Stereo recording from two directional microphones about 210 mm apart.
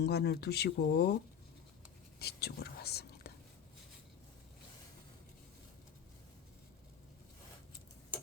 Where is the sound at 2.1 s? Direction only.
50° left (ahead or behind).